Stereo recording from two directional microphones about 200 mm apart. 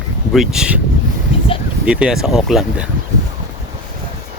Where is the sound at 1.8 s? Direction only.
5° right (ahead or behind).